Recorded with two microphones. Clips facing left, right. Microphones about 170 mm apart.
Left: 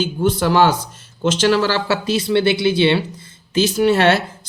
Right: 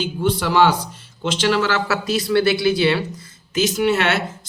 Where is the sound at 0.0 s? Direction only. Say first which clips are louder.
Left 3 dB; 45° left (ahead or behind).